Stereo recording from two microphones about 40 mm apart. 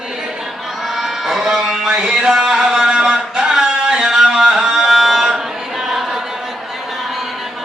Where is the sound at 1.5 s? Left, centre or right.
Centre.